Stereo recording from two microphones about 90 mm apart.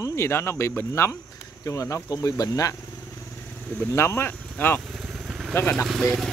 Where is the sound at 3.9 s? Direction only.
30° left (ahead or behind).